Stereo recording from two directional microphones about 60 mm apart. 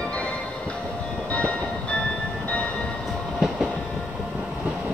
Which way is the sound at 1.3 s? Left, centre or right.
Left.